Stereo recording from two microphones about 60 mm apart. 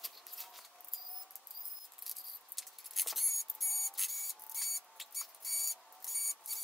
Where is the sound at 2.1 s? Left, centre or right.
Centre.